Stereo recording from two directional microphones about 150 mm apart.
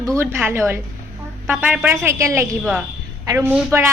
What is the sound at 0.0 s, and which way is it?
A woman's voice, 15° right (ahead or behind).